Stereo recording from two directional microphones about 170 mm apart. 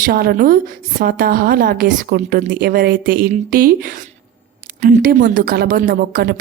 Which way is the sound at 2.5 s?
65° right (ahead or behind).